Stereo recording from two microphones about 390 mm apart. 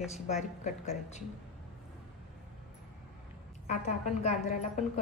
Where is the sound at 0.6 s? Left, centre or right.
Centre.